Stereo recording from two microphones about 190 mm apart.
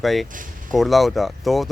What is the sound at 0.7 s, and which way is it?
Speech, centre (ahead or behind).